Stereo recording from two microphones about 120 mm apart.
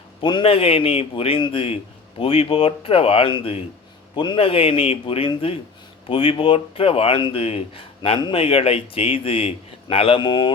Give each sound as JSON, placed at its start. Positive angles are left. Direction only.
{"t": 0.2, "sound": "a man's voice", "side_deg": 40}